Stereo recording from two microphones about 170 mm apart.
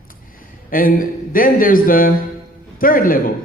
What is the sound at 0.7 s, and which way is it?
A man's voice, 55° left (ahead or behind).